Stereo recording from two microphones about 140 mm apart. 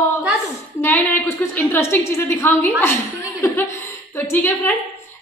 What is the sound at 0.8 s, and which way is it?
A woman's voice, 15° left (ahead or behind).